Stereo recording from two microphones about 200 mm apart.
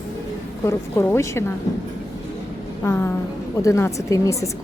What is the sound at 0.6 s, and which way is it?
Speech, 10° left (ahead or behind).